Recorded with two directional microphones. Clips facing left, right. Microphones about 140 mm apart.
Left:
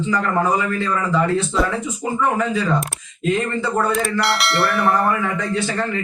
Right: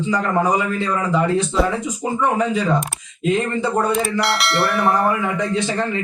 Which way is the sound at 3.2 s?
15° right (ahead or behind).